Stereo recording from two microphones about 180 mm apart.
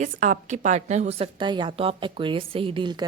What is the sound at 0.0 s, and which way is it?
Speech, 45° right (ahead or behind).